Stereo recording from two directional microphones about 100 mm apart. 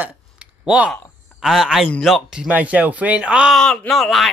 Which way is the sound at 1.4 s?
5° right (ahead or behind).